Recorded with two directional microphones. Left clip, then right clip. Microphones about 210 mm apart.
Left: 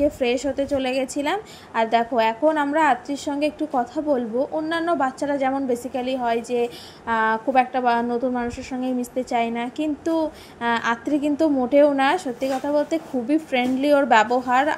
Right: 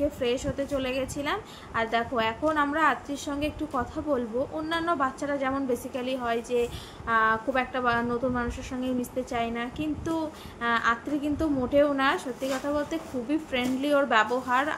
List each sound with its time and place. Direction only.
0.2 s a woman's voice: 30° left (ahead or behind)